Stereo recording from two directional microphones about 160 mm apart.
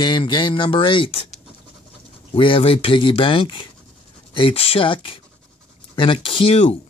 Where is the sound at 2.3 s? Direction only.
35° left (ahead or behind).